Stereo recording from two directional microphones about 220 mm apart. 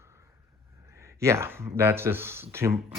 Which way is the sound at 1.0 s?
15° right (ahead or behind).